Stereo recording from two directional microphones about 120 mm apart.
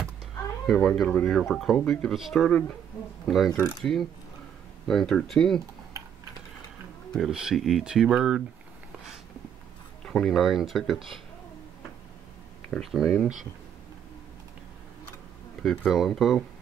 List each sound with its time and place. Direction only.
0.7 s speech: 5° left (ahead or behind)
4.8 s speech: 5° left (ahead or behind)
7.2 s speech: 5° right (ahead or behind)
10.0 s speech: 5° left (ahead or behind)
12.7 s speech: centre (ahead or behind)
15.6 s speech: 10° left (ahead or behind)